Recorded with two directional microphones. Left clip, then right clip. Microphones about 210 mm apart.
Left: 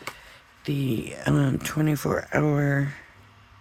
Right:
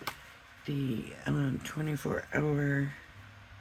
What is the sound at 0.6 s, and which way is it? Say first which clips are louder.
Speech: left 8 dB; 45° left (ahead or behind).